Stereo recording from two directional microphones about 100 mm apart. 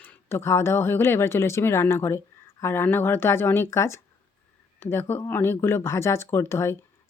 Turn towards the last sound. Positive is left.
turn(degrees=25)  # may be behind; listen again after turning